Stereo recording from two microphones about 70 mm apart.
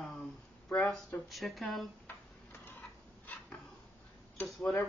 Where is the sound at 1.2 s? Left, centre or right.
Centre.